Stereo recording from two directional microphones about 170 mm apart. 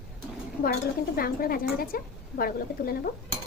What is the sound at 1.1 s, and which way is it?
A woman's voice, 60° left (ahead or behind).